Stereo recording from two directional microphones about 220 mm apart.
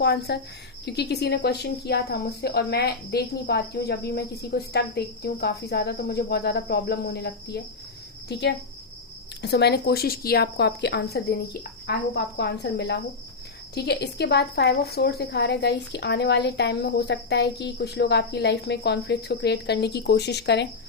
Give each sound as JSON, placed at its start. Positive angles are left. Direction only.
{"t": 0.0, "sound": "a woman's voice", "side_deg": 50}